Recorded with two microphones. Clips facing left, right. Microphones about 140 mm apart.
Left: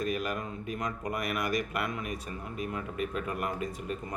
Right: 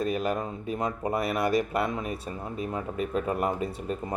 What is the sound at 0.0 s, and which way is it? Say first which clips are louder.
Speech: right 5 dB; 30° right (ahead or behind).